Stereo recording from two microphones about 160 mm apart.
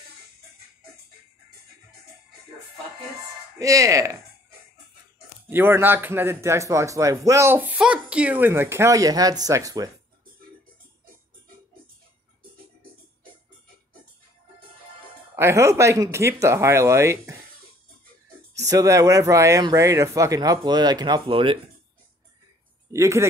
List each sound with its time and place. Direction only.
3.5 s speech: 20° right (ahead or behind)
5.5 s speech: 15° right (ahead or behind)
15.3 s speech: 15° right (ahead or behind)
18.7 s speech: 20° right (ahead or behind)
22.9 s speech: 15° right (ahead or behind)